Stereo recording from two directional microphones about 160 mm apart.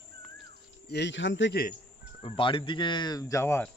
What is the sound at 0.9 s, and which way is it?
Speech, 90° left.